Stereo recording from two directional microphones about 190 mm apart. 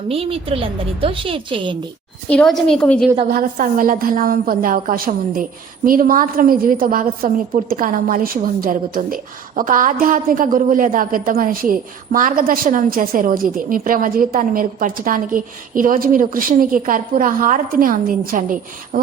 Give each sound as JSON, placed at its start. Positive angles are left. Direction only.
{"t": 0.1, "sound": "a woman's voice", "side_deg": -30}
{"t": 2.3, "sound": "a woman's voice", "side_deg": 5}
{"t": 3.2, "sound": "a woman's voice", "side_deg": -45}